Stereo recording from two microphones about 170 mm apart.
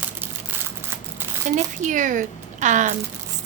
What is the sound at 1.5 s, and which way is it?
Speech, 45° right (ahead or behind).